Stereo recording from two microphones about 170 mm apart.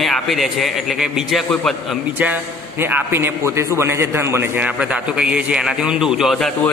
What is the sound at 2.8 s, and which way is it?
A man's voice, 15° right (ahead or behind).